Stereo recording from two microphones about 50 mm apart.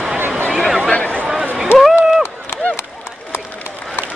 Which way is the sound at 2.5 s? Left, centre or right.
Left.